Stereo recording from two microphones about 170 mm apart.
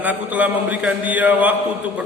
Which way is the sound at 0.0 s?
10° right (ahead or behind).